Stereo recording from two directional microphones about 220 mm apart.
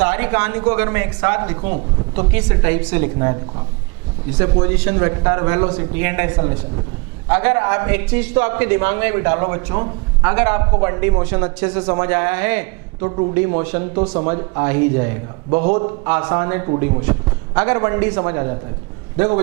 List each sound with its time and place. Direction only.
0.0 s a man's voice: 10° right (ahead or behind)
13.1 s a man's voice: 25° right (ahead or behind)
13.3 s a man's voice: 10° right (ahead or behind)